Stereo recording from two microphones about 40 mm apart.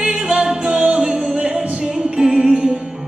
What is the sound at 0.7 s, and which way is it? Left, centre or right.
Music, right.